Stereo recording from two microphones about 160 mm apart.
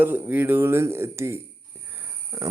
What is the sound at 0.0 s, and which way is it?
Speech, 10° right (ahead or behind).